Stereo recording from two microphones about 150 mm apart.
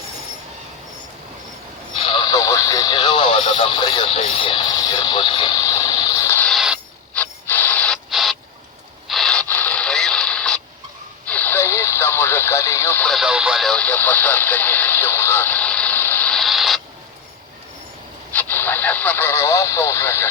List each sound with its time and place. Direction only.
2.0 s radio: 35° left (ahead or behind); by 6.5 s 15° left (ahead or behind)
6.5 s mechanisms: 5° right (ahead or behind)
7.1 s a sound: 10° left (ahead or behind)
8.1 s rodents: centre (ahead or behind)
9.0 s a sound: centre (ahead or behind)
11.3 s radio: 10° left (ahead or behind)
13.1 s radio: 5° right (ahead or behind)
18.3 s radio: 10° left (ahead or behind)